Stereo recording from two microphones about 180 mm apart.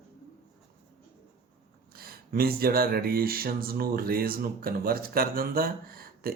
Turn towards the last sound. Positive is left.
turn(degrees=-55)  # may be behind; listen again after turning